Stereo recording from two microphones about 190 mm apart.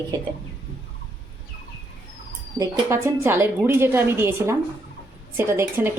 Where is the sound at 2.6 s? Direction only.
15° right (ahead or behind).